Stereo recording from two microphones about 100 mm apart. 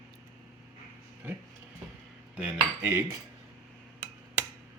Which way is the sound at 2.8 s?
30° right (ahead or behind).